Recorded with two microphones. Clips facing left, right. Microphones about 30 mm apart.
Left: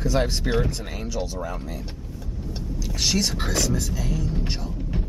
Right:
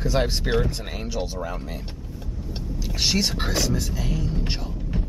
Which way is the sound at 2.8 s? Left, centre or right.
Centre.